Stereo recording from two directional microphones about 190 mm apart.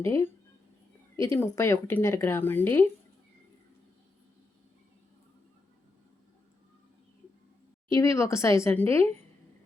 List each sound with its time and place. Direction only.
0.0 s speech: 15° left (ahead or behind)
8.1 s speech: 15° left (ahead or behind)